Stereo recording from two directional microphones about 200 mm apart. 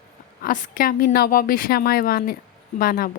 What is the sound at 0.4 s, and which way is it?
A woman's voice, 45° left (ahead or behind).